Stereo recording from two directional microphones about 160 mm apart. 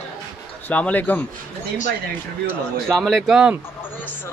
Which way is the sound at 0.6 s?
10° left (ahead or behind).